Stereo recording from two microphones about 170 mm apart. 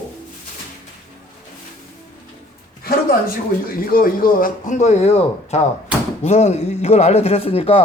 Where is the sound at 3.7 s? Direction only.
60° left (ahead or behind).